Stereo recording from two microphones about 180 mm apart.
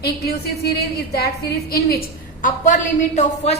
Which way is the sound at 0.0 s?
60° left (ahead or behind).